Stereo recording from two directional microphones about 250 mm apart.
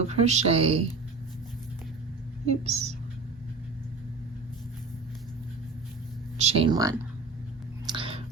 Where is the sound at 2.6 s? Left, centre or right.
Right.